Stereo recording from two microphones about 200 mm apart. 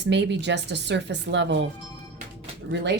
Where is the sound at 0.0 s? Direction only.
60° right (ahead or behind).